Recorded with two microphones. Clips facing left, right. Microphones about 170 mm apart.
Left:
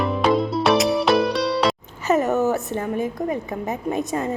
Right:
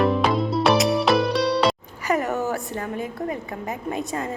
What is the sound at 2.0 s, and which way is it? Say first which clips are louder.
A woman's voice: left 4 dB; 20° left (ahead or behind).